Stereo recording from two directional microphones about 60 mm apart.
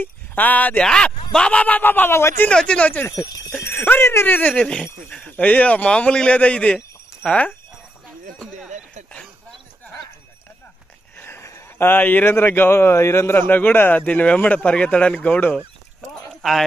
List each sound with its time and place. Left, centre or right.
0.0 s speech: left
0.7 s a man's voice: centre; by 2.4 s left
2.5 s speech: centre
4.0 s a man's voice: left
4.3 s a man's voice: left
11.1 s a sound: left
11.8 s a man's voice: left
13.4 s a man's voice: left
16.4 s speech: centre